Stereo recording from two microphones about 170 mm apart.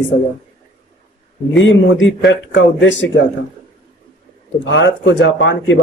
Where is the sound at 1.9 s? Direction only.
90° left.